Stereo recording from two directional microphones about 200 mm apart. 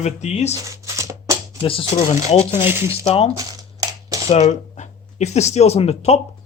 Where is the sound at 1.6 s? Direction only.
25° left (ahead or behind).